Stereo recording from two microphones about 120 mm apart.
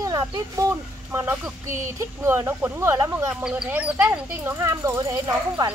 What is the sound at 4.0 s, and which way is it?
Speech, 20° right (ahead or behind).